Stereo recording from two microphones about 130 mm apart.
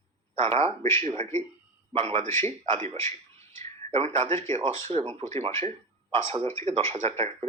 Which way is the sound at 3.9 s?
55° right (ahead or behind).